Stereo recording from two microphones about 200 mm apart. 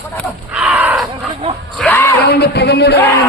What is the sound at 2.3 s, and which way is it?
Speech, 55° left (ahead or behind).